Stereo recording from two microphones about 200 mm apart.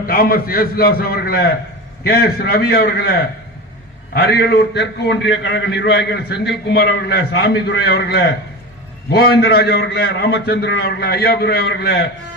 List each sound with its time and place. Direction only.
0.0 s a man's voice: 45° left (ahead or behind)